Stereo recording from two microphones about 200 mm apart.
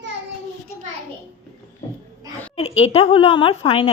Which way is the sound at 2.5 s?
30° left (ahead or behind).